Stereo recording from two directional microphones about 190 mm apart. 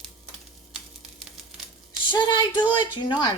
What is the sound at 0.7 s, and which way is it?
Sizzle, centre (ahead or behind).